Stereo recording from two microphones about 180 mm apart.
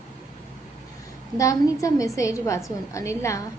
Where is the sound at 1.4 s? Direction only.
20° left (ahead or behind).